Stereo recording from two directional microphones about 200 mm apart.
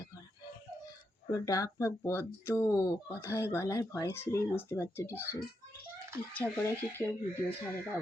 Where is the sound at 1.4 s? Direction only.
15° left (ahead or behind).